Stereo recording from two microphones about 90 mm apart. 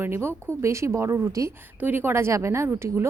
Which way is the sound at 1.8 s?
20° right (ahead or behind).